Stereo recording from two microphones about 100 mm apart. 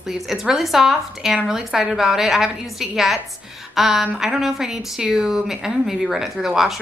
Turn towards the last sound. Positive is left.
turn(degrees=-5)  # may be behind; listen again after turning